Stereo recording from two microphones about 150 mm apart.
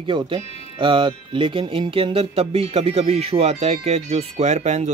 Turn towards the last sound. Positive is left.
turn(degrees=-50)  # may be behind; listen again after turning